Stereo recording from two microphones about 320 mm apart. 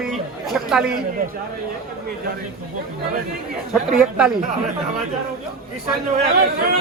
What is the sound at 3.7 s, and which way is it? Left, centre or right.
Speech, centre.